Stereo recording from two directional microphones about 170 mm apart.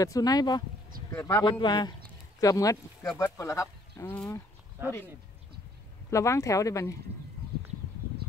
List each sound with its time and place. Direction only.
0.0 s speech: 20° left (ahead or behind)
6.0 s speech: 15° left (ahead or behind)